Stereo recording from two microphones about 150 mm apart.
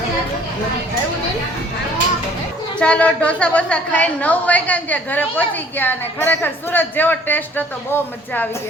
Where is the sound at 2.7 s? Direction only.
10° left (ahead or behind).